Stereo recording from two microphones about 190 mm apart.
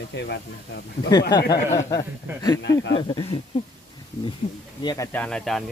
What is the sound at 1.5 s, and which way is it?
Speech, 20° left (ahead or behind).